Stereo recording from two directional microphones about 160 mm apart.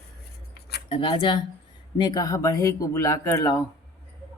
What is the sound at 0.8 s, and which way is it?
Speech, 30° left (ahead or behind).